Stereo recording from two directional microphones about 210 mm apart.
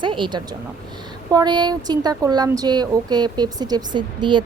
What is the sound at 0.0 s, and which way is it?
A woman's voice, 25° right (ahead or behind).